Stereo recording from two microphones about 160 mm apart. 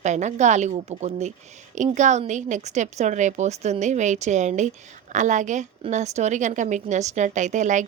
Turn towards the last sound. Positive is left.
turn(degrees=-50)  # may be behind; listen again after turning